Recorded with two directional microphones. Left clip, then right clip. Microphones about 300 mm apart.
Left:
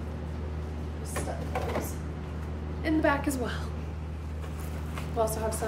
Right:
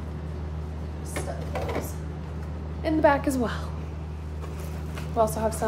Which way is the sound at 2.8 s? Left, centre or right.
Centre.